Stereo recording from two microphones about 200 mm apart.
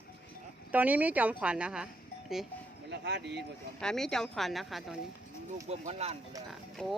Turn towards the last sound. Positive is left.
turn(degrees=0)  # may be behind; listen again after turning